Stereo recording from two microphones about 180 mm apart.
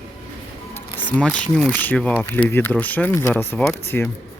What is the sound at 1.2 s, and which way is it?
Speech, 5° left (ahead or behind).